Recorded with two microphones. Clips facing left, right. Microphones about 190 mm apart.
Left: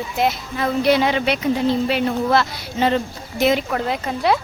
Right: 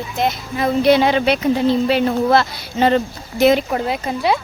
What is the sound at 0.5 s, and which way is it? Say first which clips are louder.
Speech: right 4 dB; 25° right (ahead or behind).